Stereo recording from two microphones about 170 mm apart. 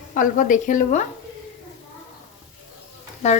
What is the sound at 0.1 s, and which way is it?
Speech, 50° left (ahead or behind).